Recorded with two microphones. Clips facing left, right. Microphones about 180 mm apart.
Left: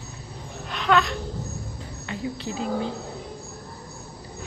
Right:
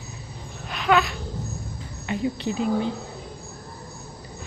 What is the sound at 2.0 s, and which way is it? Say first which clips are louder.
Speech: right 5 dB; 15° right (ahead or behind).